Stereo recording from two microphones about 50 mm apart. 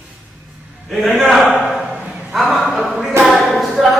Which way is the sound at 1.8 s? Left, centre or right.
Right.